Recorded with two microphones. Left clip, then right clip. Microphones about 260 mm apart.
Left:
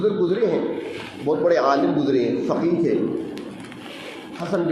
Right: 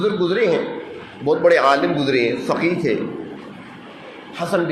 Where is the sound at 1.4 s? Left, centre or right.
Right.